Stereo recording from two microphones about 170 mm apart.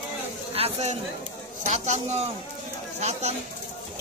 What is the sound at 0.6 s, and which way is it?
A man's voice, 40° right (ahead or behind).